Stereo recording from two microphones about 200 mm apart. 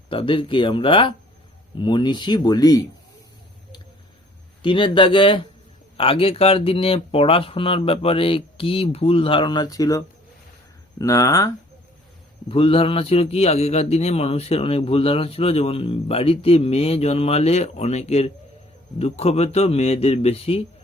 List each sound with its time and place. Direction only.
0.1 s speech: 25° left (ahead or behind)
4.6 s speech: 25° left (ahead or behind)
12.5 s a man's voice: 25° left (ahead or behind)